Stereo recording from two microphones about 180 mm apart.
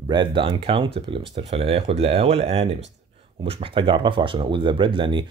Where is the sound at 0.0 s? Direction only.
25° right (ahead or behind).